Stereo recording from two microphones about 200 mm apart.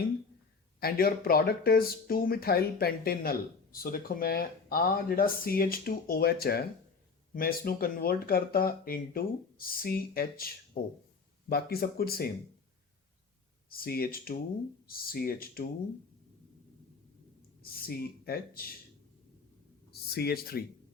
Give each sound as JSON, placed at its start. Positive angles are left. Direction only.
{"t": 0.8, "sound": "speech", "side_deg": 50}
{"t": 13.7, "sound": "speech", "side_deg": 50}
{"t": 17.6, "sound": "speech", "side_deg": 50}
{"t": 19.9, "sound": "speech", "side_deg": 50}